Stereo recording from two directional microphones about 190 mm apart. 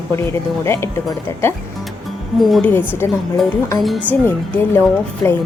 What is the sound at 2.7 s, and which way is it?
Speech, 10° left (ahead or behind).